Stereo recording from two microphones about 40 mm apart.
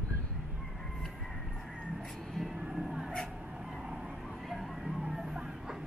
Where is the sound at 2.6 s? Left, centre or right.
Centre.